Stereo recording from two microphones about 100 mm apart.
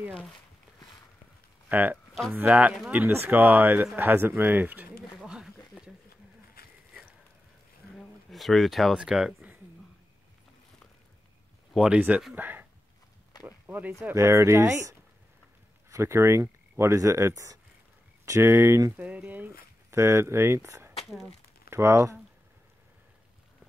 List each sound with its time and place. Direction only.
1.7 s speech: 15° right (ahead or behind)
5.2 s a sound: 5° right (ahead or behind)
7.9 s speech: centre (ahead or behind)
11.7 s speech: 5° right (ahead or behind)
12.4 s speech: 20° right (ahead or behind)
18.9 s speech: 15° right (ahead or behind)
19.9 s speech: 30° right (ahead or behind)